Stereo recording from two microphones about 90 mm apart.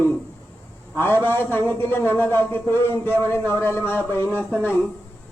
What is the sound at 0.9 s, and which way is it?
A man's voice, 25° left (ahead or behind).